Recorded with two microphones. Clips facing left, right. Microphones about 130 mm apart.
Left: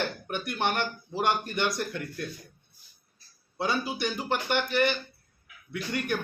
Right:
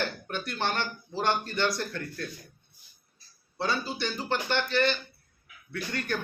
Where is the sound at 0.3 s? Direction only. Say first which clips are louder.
Left 2 dB; 15° left (ahead or behind).